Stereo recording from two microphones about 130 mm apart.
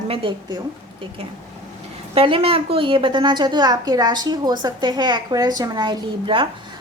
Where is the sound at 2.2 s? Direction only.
45° right (ahead or behind).